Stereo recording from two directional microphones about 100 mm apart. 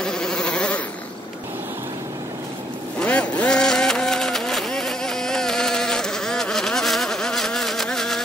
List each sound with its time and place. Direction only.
0.0 s insect: 5° left (ahead or behind)
3.0 s vehicle: 15° left (ahead or behind)